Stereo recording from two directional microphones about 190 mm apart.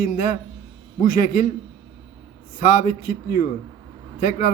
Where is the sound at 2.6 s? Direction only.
45° left (ahead or behind).